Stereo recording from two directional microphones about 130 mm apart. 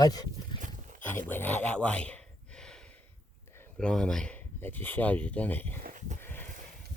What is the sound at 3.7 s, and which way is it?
Speech, 5° left (ahead or behind).